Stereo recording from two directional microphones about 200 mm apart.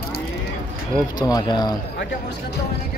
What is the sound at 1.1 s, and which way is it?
Speech, 20° left (ahead or behind).